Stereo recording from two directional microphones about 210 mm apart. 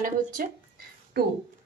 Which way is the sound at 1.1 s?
50° right (ahead or behind).